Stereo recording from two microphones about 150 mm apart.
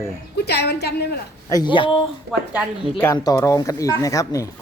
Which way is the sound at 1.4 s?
25° left (ahead or behind).